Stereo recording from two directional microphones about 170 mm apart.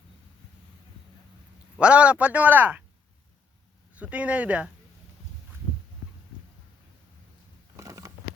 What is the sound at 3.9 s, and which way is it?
Speech, 10° right (ahead or behind).